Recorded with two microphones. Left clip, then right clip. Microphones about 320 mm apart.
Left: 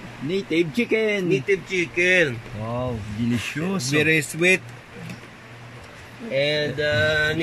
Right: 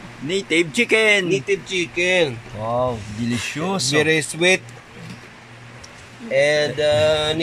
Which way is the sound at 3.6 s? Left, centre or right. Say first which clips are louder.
Right 3 dB; centre.